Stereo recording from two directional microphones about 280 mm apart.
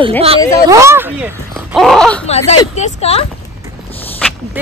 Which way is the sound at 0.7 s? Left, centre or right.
Centre.